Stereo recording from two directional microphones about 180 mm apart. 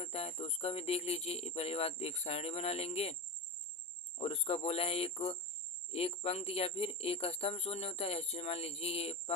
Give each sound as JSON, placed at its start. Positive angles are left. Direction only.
{"t": 0.0, "sound": "speech", "side_deg": 35}
{"t": 4.2, "sound": "speech", "side_deg": 35}